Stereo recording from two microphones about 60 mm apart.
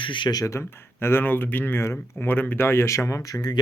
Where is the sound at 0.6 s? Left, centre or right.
Left.